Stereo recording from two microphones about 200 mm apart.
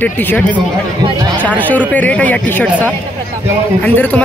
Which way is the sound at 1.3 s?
10° left (ahead or behind).